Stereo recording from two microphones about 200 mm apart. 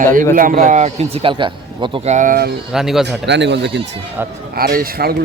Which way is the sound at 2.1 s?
45° right (ahead or behind).